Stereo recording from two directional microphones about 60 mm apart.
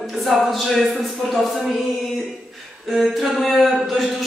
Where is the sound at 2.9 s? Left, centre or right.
Centre.